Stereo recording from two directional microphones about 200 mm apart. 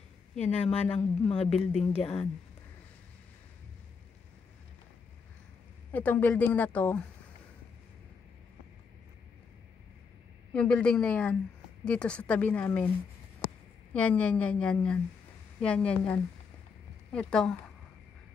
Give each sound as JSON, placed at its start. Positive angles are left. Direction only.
{"t": 0.5, "sound": "a woman's voice", "side_deg": 5}
{"t": 0.9, "sound": "speech", "side_deg": 30}
{"t": 5.9, "sound": "a woman's voice", "side_deg": 10}
{"t": 10.5, "sound": "a woman's voice", "side_deg": 5}
{"t": 13.9, "sound": "a woman's voice", "side_deg": 5}